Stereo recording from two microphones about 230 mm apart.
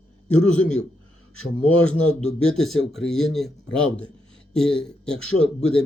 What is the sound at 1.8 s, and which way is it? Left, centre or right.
Speech, centre.